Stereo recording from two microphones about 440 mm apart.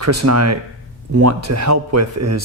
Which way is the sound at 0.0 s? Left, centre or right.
Right.